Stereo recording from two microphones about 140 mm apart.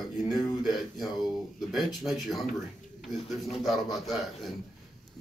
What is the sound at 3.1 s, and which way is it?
Speech, centre (ahead or behind).